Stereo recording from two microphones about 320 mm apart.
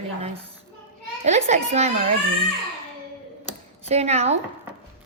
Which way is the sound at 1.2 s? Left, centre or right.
Right.